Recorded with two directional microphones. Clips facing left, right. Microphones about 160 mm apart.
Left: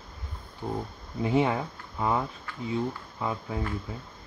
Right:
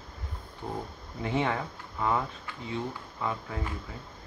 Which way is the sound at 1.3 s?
20° left (ahead or behind).